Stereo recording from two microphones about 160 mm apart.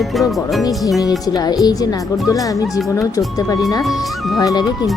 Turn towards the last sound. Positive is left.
turn(degrees=25)  # may be behind; listen again after turning